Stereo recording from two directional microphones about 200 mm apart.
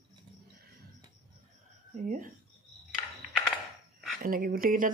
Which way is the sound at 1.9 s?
40° right (ahead or behind).